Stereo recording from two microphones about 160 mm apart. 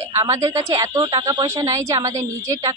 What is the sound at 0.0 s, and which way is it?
A woman's voice, 20° right (ahead or behind).